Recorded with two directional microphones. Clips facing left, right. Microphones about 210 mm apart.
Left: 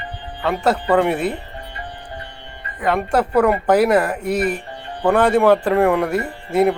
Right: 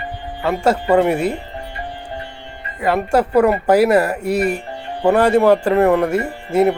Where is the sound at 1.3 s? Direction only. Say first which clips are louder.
Right 4 dB; 25° right (ahead or behind).